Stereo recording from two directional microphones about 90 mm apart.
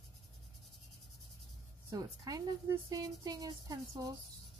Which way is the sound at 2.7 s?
40° right (ahead or behind).